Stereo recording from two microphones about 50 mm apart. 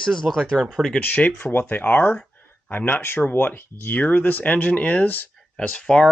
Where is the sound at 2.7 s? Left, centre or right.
Left.